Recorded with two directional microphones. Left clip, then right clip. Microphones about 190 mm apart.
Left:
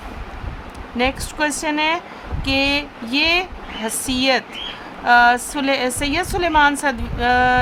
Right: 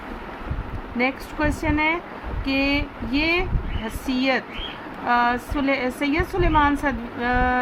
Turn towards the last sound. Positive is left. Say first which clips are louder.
# left 6 dB
turn(degrees=45)  # may be behind; listen again after turning